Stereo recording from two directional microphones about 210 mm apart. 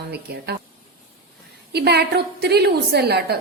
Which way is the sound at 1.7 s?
50° right (ahead or behind).